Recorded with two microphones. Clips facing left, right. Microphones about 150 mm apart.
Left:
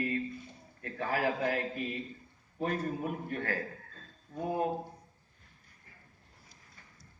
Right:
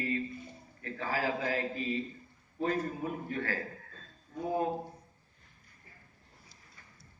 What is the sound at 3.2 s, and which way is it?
Speech, 55° left (ahead or behind).